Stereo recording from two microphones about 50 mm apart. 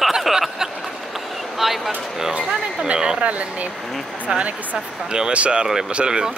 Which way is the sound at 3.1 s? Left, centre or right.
Right.